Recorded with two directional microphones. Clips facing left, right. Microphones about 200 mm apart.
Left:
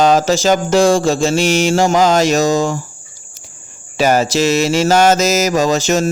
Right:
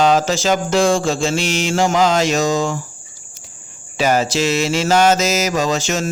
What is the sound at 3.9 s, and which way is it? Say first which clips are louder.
Speech: left 3 dB; 45° left (ahead or behind).